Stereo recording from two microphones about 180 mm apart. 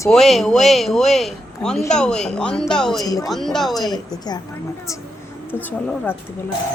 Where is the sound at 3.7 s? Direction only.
20° left (ahead or behind).